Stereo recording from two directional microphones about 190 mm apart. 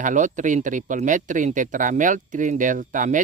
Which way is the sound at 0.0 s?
40° right (ahead or behind).